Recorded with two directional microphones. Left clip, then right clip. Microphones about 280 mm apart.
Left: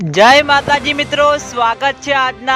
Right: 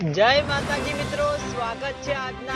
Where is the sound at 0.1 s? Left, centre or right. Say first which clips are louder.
Left 12 dB; left.